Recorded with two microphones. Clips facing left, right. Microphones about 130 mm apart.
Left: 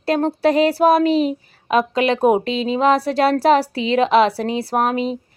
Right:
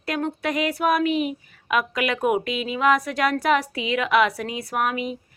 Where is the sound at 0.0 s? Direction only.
30° left (ahead or behind).